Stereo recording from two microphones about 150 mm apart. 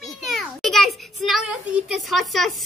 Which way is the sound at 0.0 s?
Centre (ahead or behind).